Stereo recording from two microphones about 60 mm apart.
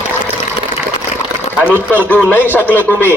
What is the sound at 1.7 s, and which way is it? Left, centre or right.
A man's voice, left.